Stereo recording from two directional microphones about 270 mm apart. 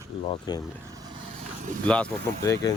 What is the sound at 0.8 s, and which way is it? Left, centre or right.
Vehicle, centre.